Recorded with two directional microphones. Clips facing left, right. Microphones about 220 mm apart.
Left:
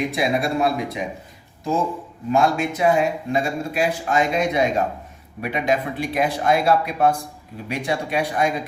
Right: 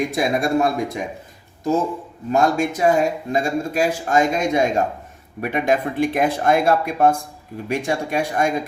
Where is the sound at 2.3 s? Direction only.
45° right (ahead or behind).